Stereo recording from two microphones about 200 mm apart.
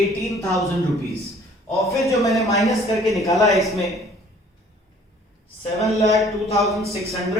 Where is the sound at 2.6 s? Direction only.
Centre (ahead or behind).